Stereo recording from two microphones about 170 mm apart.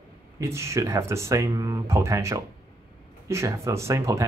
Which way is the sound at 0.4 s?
15° right (ahead or behind).